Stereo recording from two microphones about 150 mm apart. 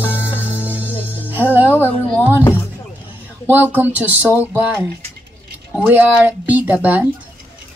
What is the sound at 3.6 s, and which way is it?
Speech, 10° right (ahead or behind).